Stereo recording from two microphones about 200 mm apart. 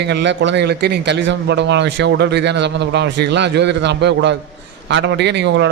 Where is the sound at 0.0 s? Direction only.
60° right (ahead or behind).